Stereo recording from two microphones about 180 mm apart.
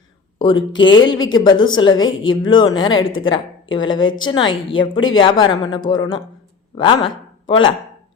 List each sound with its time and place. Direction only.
0.3 s a woman's voice: 25° left (ahead or behind)